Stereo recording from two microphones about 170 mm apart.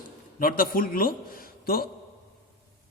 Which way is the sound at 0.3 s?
55° left (ahead or behind).